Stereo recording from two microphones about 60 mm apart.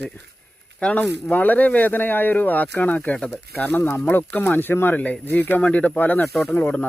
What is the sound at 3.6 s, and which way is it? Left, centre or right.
Speech, left.